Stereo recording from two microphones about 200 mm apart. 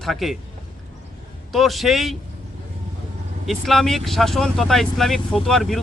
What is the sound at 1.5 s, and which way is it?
Speech, centre (ahead or behind).